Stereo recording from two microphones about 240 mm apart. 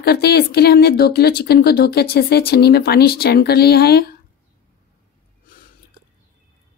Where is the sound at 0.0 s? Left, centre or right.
Left.